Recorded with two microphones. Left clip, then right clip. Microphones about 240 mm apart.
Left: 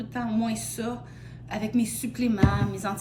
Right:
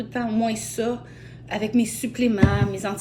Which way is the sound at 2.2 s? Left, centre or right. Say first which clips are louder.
Right 4 dB; centre.